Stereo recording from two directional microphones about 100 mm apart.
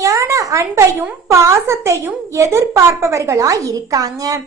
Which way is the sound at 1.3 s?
30° right (ahead or behind).